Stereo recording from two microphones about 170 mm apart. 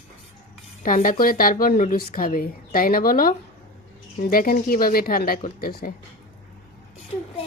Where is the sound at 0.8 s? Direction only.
50° left (ahead or behind).